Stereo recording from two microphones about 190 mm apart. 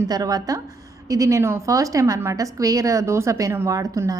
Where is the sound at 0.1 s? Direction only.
20° right (ahead or behind).